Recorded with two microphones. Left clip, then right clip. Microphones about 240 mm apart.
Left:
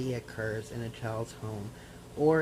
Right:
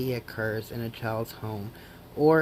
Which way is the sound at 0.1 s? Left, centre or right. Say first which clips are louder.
Right 4 dB; right.